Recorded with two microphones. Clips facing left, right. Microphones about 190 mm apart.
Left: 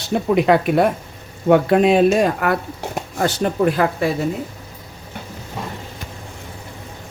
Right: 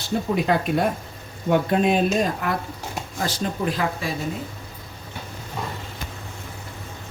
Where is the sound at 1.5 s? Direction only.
80° left; by 4.1 s 60° left (ahead or behind).